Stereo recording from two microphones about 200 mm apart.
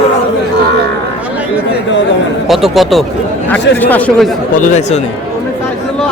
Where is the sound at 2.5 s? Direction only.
Centre (ahead or behind).